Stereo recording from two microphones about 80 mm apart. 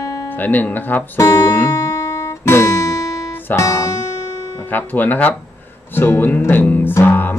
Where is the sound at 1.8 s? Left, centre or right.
Left.